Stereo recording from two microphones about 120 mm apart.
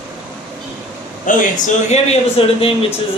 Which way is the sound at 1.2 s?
90° left.